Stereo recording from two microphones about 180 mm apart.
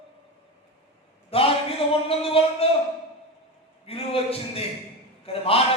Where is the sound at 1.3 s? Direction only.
30° left (ahead or behind).